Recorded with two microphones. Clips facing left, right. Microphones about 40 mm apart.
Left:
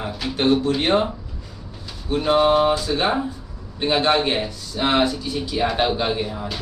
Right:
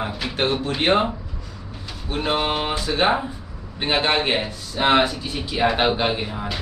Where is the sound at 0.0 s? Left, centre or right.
Right.